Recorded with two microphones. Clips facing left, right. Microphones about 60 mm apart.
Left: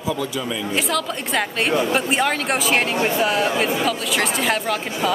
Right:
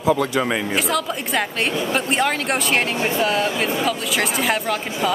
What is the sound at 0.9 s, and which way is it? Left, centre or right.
Speech, centre.